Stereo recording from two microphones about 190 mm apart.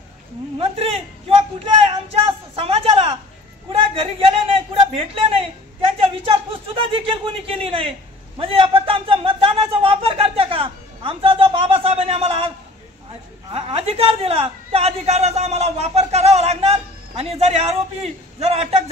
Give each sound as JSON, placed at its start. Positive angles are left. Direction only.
{"t": 0.6, "sound": "a man's voice", "side_deg": -30}
{"t": 2.6, "sound": "a sound", "side_deg": -30}
{"t": 3.9, "sound": "a man's voice", "side_deg": -30}